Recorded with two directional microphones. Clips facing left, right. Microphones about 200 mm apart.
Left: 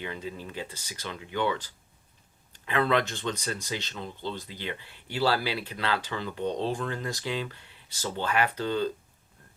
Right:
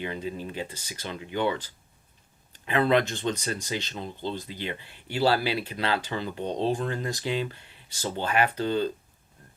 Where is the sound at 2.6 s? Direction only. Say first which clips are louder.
Right 3 dB; 20° right (ahead or behind).